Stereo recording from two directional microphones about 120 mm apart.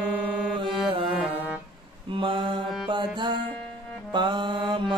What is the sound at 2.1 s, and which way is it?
Mantra, 45° right (ahead or behind).